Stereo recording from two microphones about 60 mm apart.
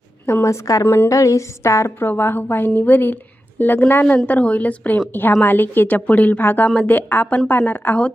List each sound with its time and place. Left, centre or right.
0.4 s a woman's voice: left
0.9 s a woman's voice: left
1.1 s a woman's voice: left
2.0 s a woman's voice: left
4.3 s a woman's voice: left